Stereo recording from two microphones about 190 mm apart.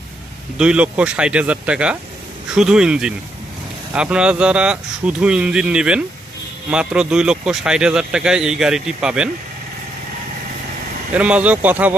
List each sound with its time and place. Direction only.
0.6 s speech: 5° right (ahead or behind)
11.1 s speech: 5° right (ahead or behind)